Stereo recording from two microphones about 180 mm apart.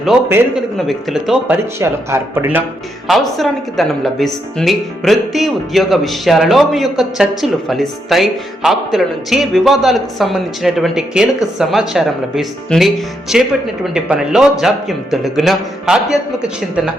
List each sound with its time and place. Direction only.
0.3 s speech: 10° right (ahead or behind)
0.8 s a woman's voice: centre (ahead or behind)
1.8 s speech: 15° right (ahead or behind)
3.1 s a woman's voice: centre (ahead or behind)